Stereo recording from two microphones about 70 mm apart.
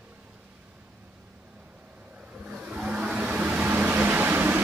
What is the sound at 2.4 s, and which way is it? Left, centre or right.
Vehicle, centre.